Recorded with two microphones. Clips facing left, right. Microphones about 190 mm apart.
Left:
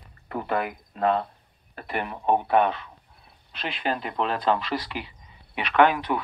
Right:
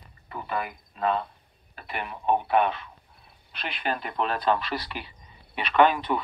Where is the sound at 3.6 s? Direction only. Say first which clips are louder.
Left 2 dB; 25° left (ahead or behind).